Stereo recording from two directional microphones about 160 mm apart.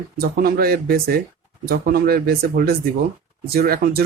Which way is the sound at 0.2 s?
70° right (ahead or behind).